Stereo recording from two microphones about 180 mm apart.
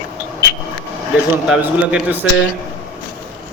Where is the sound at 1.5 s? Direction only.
10° right (ahead or behind).